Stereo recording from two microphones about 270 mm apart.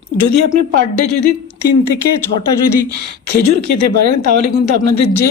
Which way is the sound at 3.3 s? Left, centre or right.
Left.